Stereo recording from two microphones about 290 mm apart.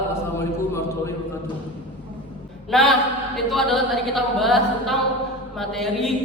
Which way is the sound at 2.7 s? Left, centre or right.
Centre.